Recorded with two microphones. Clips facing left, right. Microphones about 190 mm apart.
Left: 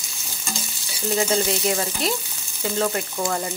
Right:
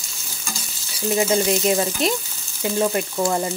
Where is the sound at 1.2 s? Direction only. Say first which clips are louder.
Right 3 dB; 20° right (ahead or behind).